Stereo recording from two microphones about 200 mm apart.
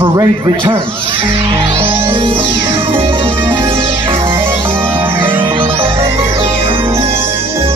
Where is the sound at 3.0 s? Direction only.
25° right (ahead or behind).